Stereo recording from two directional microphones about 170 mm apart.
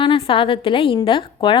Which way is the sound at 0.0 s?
30° left (ahead or behind).